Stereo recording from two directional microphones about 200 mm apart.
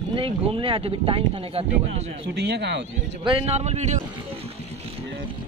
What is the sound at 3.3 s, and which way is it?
Speech, 30° right (ahead or behind).